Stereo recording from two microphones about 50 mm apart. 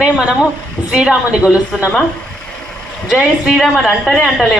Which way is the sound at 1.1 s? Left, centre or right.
Right.